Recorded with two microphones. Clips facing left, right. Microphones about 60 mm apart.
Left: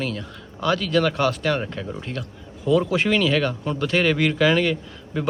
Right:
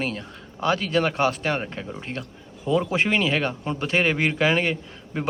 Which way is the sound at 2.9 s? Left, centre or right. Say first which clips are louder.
Left 2 dB; centre.